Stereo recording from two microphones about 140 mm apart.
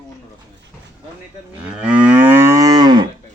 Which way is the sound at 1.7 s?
10° right (ahead or behind).